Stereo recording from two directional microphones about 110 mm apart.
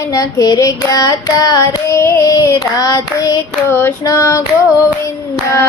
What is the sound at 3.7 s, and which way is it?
Female singing, 20° left (ahead or behind).